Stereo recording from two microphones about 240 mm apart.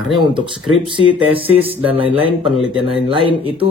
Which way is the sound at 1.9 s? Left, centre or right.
Right.